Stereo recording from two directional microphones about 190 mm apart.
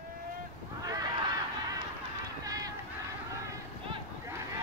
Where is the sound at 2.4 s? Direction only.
20° right (ahead or behind).